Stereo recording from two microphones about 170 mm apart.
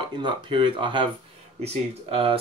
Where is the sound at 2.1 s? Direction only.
35° right (ahead or behind).